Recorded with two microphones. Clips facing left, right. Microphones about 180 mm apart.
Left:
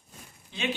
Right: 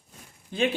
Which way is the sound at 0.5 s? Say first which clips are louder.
Right 9 dB; 45° right (ahead or behind).